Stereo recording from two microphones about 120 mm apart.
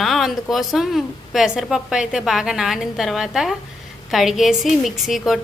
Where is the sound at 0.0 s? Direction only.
Centre (ahead or behind).